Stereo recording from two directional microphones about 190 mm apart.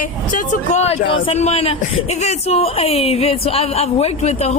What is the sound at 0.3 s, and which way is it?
A woman's voice, 40° left (ahead or behind).